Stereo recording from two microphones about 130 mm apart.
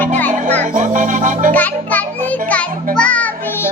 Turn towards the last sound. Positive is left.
turn(degrees=10)  # may be behind; listen again after turning